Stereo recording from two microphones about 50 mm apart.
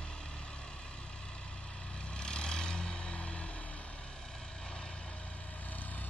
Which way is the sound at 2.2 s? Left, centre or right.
Centre.